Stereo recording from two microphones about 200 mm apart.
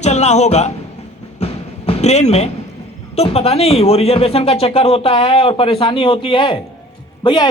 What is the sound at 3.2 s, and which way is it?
Speech, 30° left (ahead or behind).